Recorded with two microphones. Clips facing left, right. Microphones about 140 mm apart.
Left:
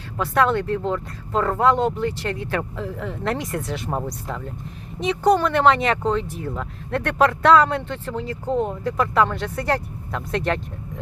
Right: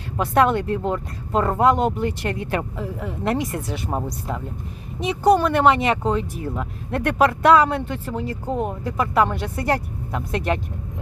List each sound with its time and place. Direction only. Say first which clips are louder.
0.2 s speech: right 2 dB; 15° right (ahead or behind)